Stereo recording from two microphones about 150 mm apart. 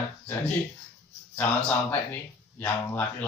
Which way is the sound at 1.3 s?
10° left (ahead or behind).